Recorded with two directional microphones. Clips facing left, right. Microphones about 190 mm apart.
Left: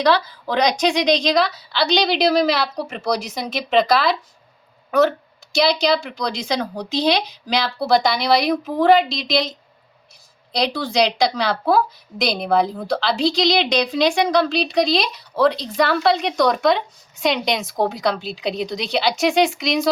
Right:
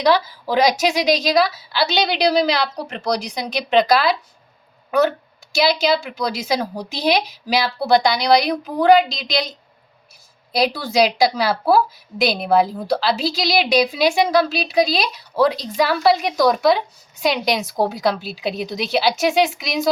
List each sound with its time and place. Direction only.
0.0 s a woman's voice: 10° right (ahead or behind)
10.5 s a woman's voice: 5° right (ahead or behind)